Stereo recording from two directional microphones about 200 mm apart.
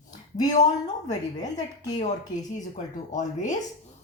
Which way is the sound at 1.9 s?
35° left (ahead or behind).